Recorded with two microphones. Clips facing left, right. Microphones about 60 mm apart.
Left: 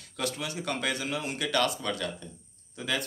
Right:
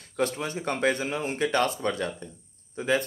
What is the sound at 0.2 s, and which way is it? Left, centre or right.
Speech, right.